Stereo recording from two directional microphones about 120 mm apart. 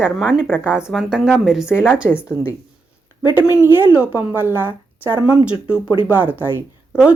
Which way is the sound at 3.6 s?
15° right (ahead or behind).